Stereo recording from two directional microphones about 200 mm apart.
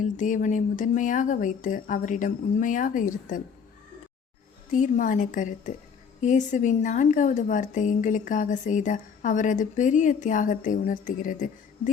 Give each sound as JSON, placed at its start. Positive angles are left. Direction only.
{"t": 0.0, "sound": "a woman's voice", "side_deg": 40}
{"t": 4.7, "sound": "a woman's voice", "side_deg": 40}